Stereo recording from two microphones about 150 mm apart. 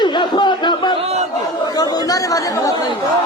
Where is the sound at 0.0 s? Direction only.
30° left (ahead or behind).